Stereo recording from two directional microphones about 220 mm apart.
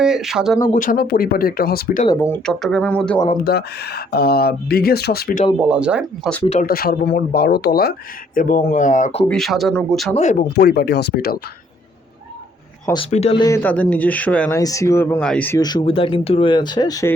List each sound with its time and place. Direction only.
0.0 s speech: centre (ahead or behind)
0.7 s speech: 40° left (ahead or behind)
2.2 s speech: centre (ahead or behind)
3.2 s speech: 45° left (ahead or behind)
5.5 s speech: 5° right (ahead or behind)
6.5 s speech: 40° left (ahead or behind)
9.2 s speech: centre (ahead or behind)
10.2 s speech: 35° left (ahead or behind)
10.5 s speech: 45° left (ahead or behind)
12.9 s speech: 25° left (ahead or behind)
13.4 s speech: 10° left (ahead or behind)